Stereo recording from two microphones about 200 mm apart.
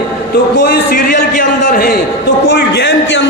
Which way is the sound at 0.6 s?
40° left (ahead or behind).